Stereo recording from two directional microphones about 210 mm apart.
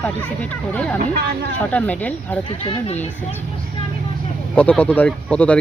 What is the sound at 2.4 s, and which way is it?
Speech, 25° left (ahead or behind).